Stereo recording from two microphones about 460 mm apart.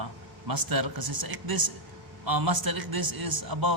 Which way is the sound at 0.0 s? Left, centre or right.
Right.